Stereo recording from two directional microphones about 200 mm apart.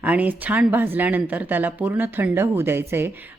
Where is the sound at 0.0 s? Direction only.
10° right (ahead or behind).